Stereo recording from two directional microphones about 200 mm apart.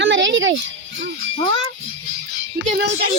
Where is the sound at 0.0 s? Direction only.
65° right (ahead or behind).